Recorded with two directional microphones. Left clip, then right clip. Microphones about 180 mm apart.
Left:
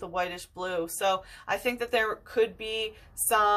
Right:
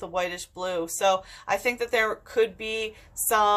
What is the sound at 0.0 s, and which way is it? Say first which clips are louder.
Speech: right 2 dB; 15° right (ahead or behind).